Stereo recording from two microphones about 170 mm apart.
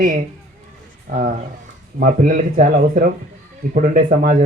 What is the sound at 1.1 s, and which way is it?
Speech, 50° right (ahead or behind).